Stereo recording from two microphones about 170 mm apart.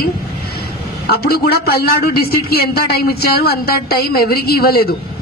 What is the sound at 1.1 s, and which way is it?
A man's voice, 65° left (ahead or behind).